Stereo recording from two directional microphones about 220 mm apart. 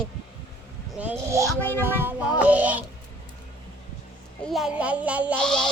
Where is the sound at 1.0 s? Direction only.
10° right (ahead or behind).